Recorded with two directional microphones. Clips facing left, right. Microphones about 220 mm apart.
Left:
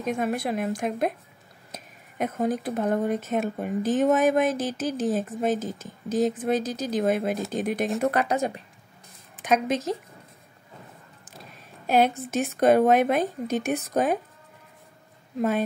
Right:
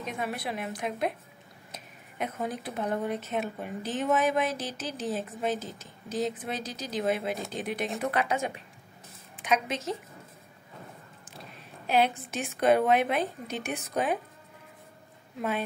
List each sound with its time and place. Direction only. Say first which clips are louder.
0.0 s speech: left 7 dB; 45° left (ahead or behind)
11.9 s speech: left 5 dB; 45° left (ahead or behind)